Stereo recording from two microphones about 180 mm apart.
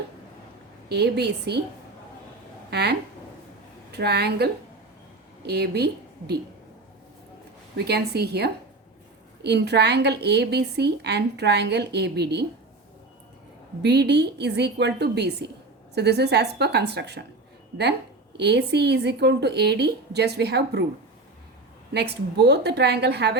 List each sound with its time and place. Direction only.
0.9 s a woman's voice: 65° right (ahead or behind)
2.6 s speech: 65° right (ahead or behind)
3.9 s a woman's voice: 65° right (ahead or behind)
5.5 s a woman's voice: 65° right (ahead or behind)
7.9 s a woman's voice: 65° right (ahead or behind)
13.8 s a woman's voice: 70° right (ahead or behind)
18.3 s a woman's voice: 70° right (ahead or behind)
21.9 s a woman's voice: 65° right (ahead or behind)